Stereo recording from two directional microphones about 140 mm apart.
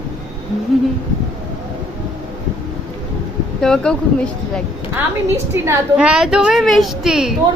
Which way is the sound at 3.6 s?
5° left (ahead or behind).